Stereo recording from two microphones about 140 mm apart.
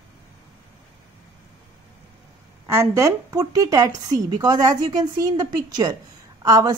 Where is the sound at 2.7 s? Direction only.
20° right (ahead or behind).